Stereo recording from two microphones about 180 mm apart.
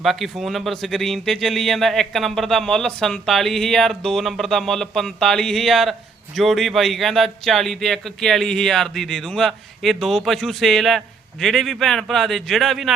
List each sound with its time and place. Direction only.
0.0 s speech: centre (ahead or behind)